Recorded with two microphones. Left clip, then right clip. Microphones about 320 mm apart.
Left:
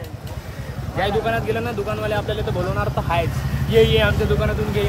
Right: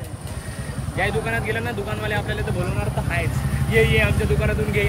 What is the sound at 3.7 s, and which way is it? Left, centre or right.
Speech, centre.